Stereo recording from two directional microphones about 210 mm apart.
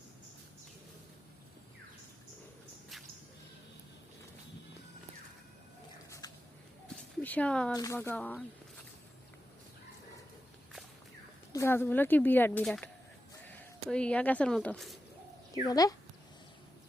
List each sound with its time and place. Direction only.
6.2 s a sound: 20° left (ahead or behind)
7.2 s speech: 5° left (ahead or behind)
7.7 s speech: 20° left (ahead or behind)
7.9 s speech: 5° left (ahead or behind)
11.5 s speech: 10° left (ahead or behind)
15.6 s speech: 15° left (ahead or behind)